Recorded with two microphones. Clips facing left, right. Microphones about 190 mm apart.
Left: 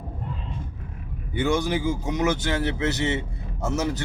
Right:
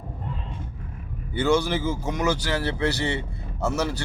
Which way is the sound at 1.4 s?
15° left (ahead or behind).